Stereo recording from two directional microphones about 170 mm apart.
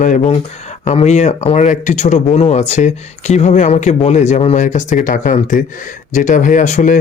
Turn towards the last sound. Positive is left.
turn(degrees=45)  # may be behind; listen again after turning